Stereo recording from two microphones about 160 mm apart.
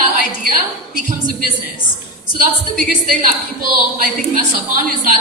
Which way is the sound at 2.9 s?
55° right (ahead or behind).